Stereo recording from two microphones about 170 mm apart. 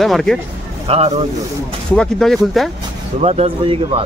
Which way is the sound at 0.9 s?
40° right (ahead or behind).